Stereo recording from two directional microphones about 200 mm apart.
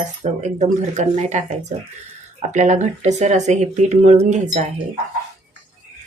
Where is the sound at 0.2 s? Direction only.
35° right (ahead or behind).